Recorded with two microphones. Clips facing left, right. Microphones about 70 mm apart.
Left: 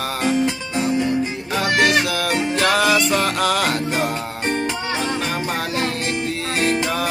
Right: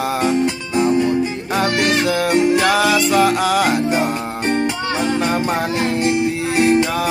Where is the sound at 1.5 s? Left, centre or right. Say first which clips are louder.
Even; right.